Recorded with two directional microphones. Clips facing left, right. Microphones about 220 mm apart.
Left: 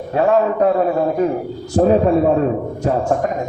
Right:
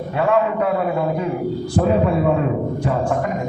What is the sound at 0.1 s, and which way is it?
A man's voice, 40° left (ahead or behind).